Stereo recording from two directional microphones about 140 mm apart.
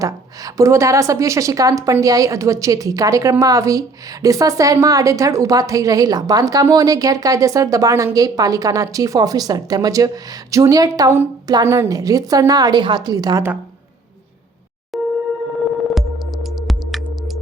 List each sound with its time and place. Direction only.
0.0 s a woman's voice: 25° right (ahead or behind)
14.9 s a sound: centre (ahead or behind)
16.0 s music: centre (ahead or behind)